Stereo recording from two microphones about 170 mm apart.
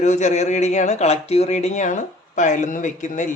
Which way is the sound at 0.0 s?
45° left (ahead or behind).